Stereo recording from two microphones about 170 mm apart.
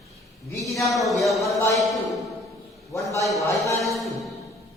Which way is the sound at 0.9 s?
Centre (ahead or behind).